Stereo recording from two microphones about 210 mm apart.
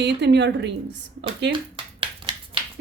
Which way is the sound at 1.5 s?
25° right (ahead or behind).